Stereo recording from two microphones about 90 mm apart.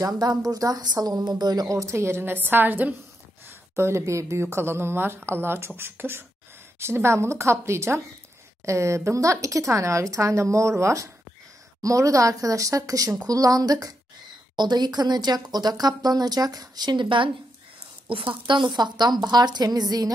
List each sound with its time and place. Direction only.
0.0 s a woman's voice: 50° right (ahead or behind)